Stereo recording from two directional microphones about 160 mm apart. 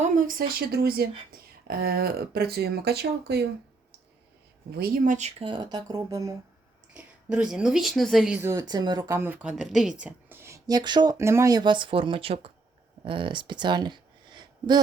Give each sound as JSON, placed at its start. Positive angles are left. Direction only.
{"t": 0.0, "sound": "speech", "side_deg": -60}
{"t": 4.7, "sound": "speech", "side_deg": -65}
{"t": 5.5, "sound": "speech", "side_deg": -25}
{"t": 6.9, "sound": "a woman's voice", "side_deg": -5}
{"t": 8.4, "sound": "speech", "side_deg": -20}